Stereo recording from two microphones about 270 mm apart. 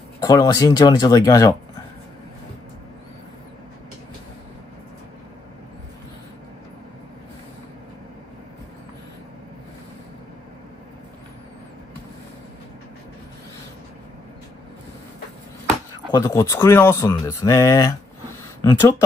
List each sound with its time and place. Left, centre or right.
0.2 s speech: centre
16.1 s speech: centre